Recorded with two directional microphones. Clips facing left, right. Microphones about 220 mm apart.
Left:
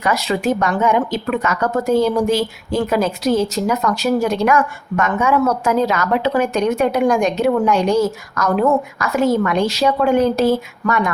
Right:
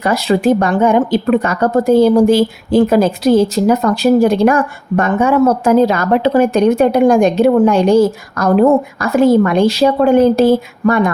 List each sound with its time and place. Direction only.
0.0 s a woman's voice: 30° right (ahead or behind)